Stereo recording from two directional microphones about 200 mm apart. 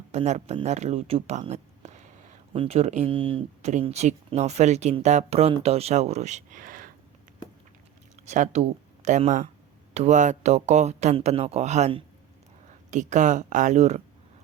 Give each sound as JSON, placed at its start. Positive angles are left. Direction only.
{"t": 0.1, "sound": "speech", "side_deg": -35}
{"t": 8.3, "sound": "speech", "side_deg": -35}